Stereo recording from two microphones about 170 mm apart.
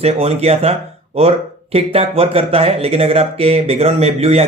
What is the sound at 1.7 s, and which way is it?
Speech, 35° right (ahead or behind).